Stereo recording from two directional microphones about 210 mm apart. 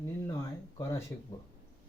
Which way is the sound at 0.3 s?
15° left (ahead or behind).